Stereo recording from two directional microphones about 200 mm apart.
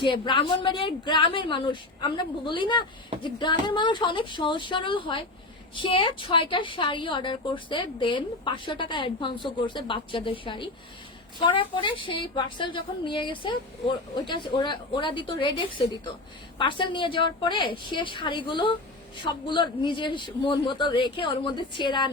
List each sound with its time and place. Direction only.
0.0 s a woman's voice: 25° left (ahead or behind)